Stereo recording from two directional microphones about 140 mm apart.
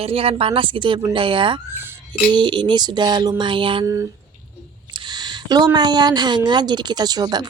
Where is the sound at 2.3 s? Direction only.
35° right (ahead or behind).